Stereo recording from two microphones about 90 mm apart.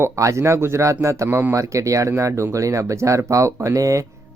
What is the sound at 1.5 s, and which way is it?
Speech, 35° right (ahead or behind).